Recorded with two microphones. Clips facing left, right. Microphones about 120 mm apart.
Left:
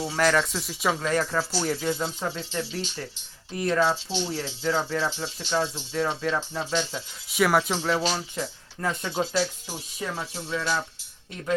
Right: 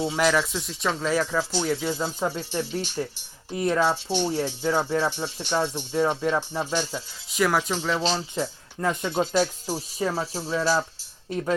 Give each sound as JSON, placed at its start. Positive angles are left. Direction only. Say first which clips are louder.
{"t": 0.0, "sound": "speech", "louder": "right 1 dB", "side_deg": -15}
{"t": 1.3, "sound": "speech", "louder": "right 2 dB", "side_deg": -15}
{"t": 3.9, "sound": "speech", "louder": "right 4 dB", "side_deg": -55}
{"t": 4.3, "sound": "speech", "louder": "right 3 dB", "side_deg": -15}
{"t": 7.3, "sound": "speech", "louder": "left 1 dB", "side_deg": 0}
{"t": 8.4, "sound": "speech", "louder": "right 3 dB", "side_deg": -25}
{"t": 9.3, "sound": "speech", "louder": "right 4 dB", "side_deg": -45}